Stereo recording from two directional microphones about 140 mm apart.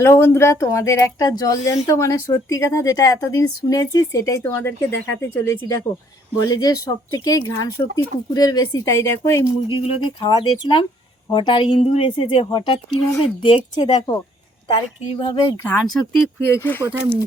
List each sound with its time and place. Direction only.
0.0 s speech: 20° left (ahead or behind)
9.6 s a woman's voice: 40° left (ahead or behind)
15.4 s speech: 15° left (ahead or behind)
15.9 s speech: 5° left (ahead or behind)
16.5 s speech: 15° left (ahead or behind)